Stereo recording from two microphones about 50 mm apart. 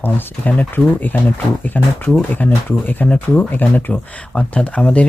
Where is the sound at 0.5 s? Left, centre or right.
Left.